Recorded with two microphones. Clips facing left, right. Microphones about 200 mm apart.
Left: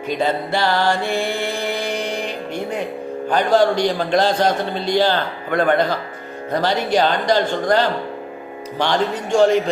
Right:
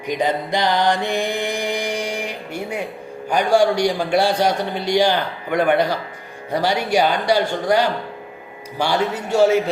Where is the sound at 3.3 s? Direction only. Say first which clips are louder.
Even; 10° right (ahead or behind).